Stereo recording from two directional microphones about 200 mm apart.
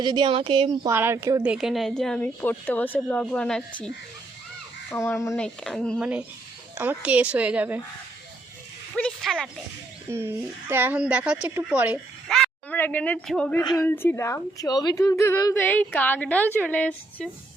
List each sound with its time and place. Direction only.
0.0 s a woman's voice: 20° right (ahead or behind)
0.9 s speech: 10° right (ahead or behind)
1.5 s a woman's voice: 5° right (ahead or behind)
4.9 s a woman's voice: 15° left (ahead or behind)
5.3 s a woman's voice: centre (ahead or behind)
6.7 s speech: 10° right (ahead or behind)
9.0 s a sound: 5° left (ahead or behind)
10.1 s speech: 10° right (ahead or behind); by 13.6 s 5° left (ahead or behind)
13.6 s a woman's voice: 20° left (ahead or behind)